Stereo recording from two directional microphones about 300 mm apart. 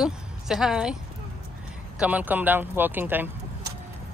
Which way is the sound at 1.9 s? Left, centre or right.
Centre.